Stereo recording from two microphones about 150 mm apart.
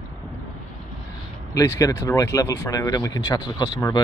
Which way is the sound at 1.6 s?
20° left (ahead or behind).